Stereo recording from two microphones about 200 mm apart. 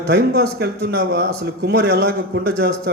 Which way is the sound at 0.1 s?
55° right (ahead or behind).